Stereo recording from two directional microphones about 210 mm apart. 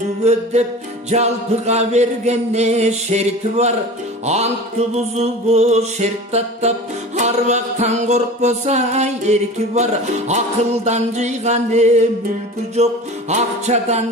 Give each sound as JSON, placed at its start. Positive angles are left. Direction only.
{"t": 0.2, "sound": "music", "side_deg": -30}